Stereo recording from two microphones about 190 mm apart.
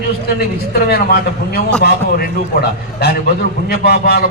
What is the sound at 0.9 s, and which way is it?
A man's voice, 55° left (ahead or behind).